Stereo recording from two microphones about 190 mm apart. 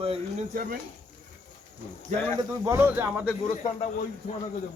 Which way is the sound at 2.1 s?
40° right (ahead or behind).